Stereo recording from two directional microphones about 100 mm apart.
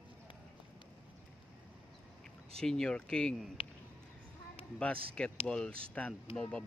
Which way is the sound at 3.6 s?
70° left (ahead or behind).